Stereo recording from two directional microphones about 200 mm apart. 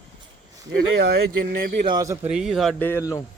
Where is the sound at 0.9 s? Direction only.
55° right (ahead or behind).